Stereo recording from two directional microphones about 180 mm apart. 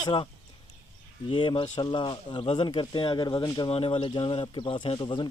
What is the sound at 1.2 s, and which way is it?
Speech, 25° left (ahead or behind).